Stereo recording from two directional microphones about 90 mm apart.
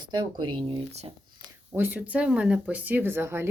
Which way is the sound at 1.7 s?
20° right (ahead or behind).